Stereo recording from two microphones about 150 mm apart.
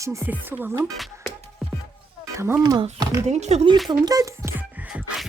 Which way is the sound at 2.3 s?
15° right (ahead or behind).